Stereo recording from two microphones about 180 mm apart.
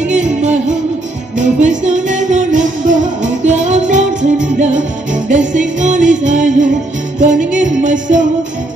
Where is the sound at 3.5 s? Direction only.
40° right (ahead or behind).